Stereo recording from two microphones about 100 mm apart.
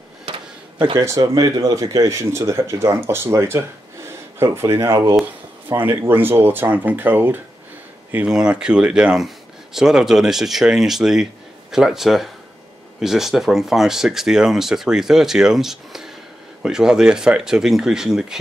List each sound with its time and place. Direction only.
0.9 s speech: 30° right (ahead or behind)
8.3 s speech: 10° right (ahead or behind)